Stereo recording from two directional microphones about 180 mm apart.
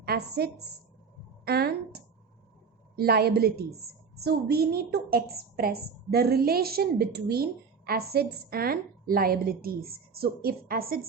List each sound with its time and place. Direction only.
0.0 s a woman's voice: 60° right (ahead or behind)